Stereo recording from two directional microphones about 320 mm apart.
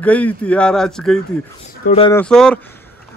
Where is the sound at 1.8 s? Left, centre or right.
Centre.